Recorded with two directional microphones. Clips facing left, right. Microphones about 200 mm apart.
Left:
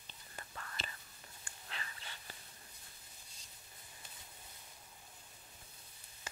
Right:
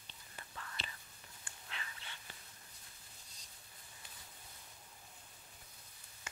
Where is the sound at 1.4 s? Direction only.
40° left (ahead or behind).